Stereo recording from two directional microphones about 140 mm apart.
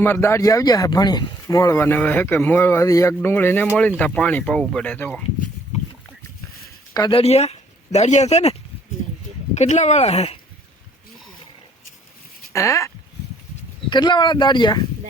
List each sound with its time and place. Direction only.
0.0 s speech: 15° left (ahead or behind)
7.1 s speech: 45° left (ahead or behind)
9.6 s speech: 55° left (ahead or behind)
12.5 s speech: 20° left (ahead or behind)
13.9 s speech: 35° left (ahead or behind)